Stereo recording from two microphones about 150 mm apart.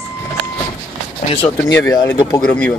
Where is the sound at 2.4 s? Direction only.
5° left (ahead or behind).